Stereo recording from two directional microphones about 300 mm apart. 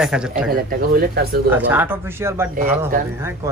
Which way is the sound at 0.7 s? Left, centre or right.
Right.